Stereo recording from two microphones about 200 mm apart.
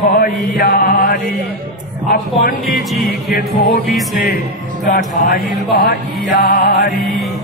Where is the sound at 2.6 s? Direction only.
Centre (ahead or behind).